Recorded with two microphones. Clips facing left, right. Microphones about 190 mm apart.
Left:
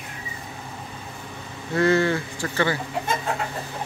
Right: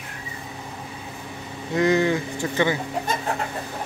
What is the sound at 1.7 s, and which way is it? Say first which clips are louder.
Speech: even; 15° right (ahead or behind).